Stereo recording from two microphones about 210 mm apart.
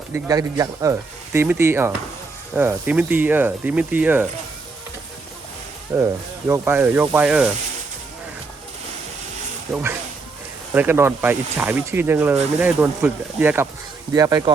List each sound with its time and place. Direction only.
0.1 s speech: 15° right (ahead or behind)
5.9 s speech: 10° right (ahead or behind)
10.7 s speech: 10° right (ahead or behind)